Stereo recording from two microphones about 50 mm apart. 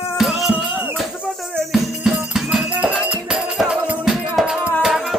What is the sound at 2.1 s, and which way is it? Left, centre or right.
Music, centre.